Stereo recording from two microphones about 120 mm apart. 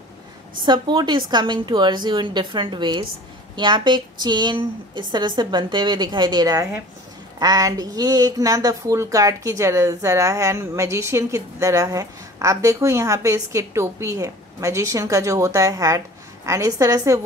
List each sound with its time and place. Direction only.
0.7 s a woman's voice: 40° right (ahead or behind)